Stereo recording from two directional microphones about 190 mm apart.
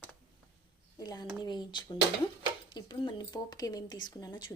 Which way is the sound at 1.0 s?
20° left (ahead or behind).